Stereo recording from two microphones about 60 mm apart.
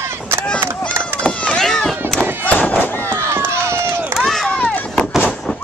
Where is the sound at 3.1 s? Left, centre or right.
Right.